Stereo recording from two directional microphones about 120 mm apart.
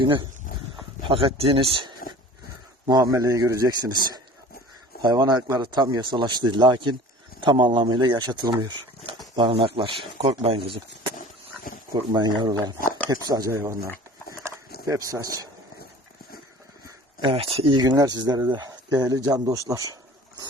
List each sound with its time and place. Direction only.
0.0 s speech: 40° right (ahead or behind)
2.8 s speech: 30° right (ahead or behind)
5.1 s speech: 35° right (ahead or behind); by 11.1 s 50° right (ahead or behind)
12.1 s speech: 35° right (ahead or behind)
13.5 s speech: 20° right (ahead or behind)
14.4 s a sound: 30° right (ahead or behind)
16.8 s a sound: 40° right (ahead or behind)
17.3 s speech: 50° right (ahead or behind)
17.7 s speech: 35° right (ahead or behind)